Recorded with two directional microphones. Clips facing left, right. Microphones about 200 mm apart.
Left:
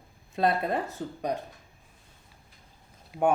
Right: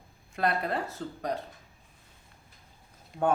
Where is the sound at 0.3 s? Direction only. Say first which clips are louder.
Left 3 dB; 20° left (ahead or behind).